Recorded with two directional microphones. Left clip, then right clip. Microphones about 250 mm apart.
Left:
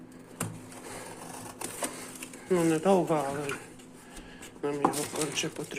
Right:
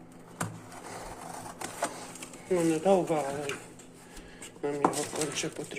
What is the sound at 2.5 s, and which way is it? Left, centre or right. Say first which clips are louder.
Speech: even; centre.